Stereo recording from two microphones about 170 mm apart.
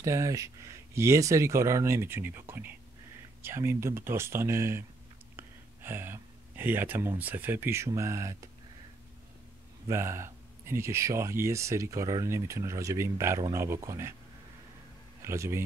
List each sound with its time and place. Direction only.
0.0 s speech: 20° right (ahead or behind)
9.8 s speech: 15° right (ahead or behind)
15.2 s speech: 15° right (ahead or behind)